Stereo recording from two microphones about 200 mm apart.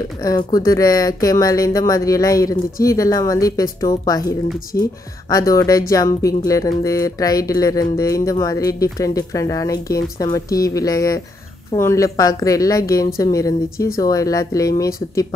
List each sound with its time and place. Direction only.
0.2 s speech: 15° left (ahead or behind)
4.7 s speech: 55° left (ahead or behind)
5.3 s speech: 15° left (ahead or behind)